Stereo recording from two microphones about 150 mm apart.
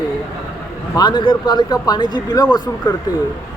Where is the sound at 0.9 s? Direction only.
30° left (ahead or behind).